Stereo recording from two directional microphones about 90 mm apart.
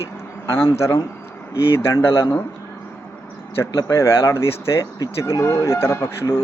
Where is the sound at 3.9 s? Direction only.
30° left (ahead or behind).